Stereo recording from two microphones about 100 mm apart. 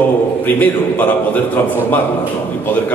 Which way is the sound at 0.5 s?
15° left (ahead or behind).